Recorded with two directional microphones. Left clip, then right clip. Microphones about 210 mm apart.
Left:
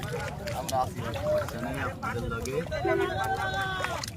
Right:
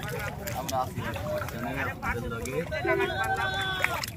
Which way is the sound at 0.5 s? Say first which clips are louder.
Left 1 dB; centre (ahead or behind).